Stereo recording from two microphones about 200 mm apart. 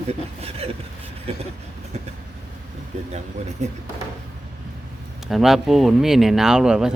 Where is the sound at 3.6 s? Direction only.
35° right (ahead or behind).